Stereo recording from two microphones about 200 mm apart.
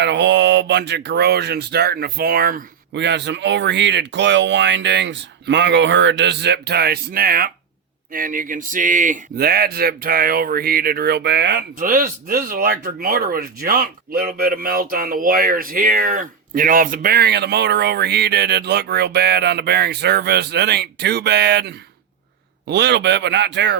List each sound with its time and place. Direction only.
0.0 s speech: 60° right (ahead or behind)
11.8 s speech: 45° right (ahead or behind); by 23.7 s 60° right (ahead or behind)